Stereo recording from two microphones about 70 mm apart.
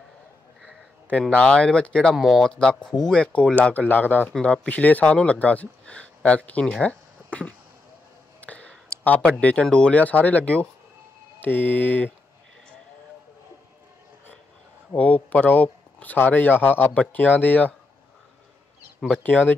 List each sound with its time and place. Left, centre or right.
1.3 s speech: centre
2.1 s speech: centre
2.4 s speech: centre
4.3 s speech: centre
4.6 s speech: left
8.4 s clicking: centre
9.2 s speech: centre
15.0 s speech: centre
19.0 s speech: centre